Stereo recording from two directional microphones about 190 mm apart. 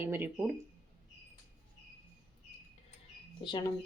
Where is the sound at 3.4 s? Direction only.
25° left (ahead or behind).